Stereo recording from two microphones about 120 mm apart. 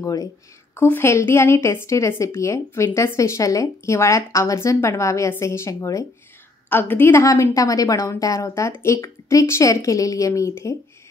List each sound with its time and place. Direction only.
0.0 s a woman's voice: 30° left (ahead or behind)
0.7 s a woman's voice: 15° left (ahead or behind)